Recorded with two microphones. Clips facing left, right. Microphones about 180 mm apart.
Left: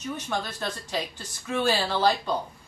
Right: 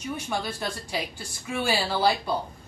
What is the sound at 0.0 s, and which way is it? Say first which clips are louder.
Speech: right 1 dB; 10° right (ahead or behind).